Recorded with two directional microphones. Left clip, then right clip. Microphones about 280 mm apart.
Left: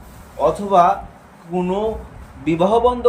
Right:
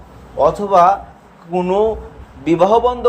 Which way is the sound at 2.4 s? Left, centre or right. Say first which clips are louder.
Right 3 dB; centre.